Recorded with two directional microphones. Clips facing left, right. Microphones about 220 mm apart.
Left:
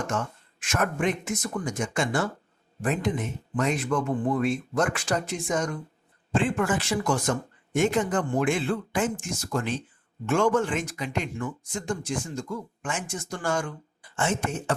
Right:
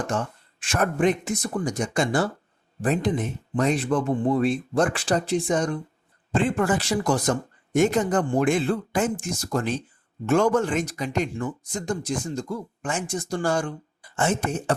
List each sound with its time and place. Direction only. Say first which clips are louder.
0.1 s speech: right 2 dB; 35° right (ahead or behind)